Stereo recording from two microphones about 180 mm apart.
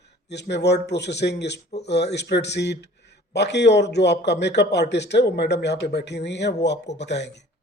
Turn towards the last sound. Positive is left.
turn(degrees=70)  # may be behind; listen again after turning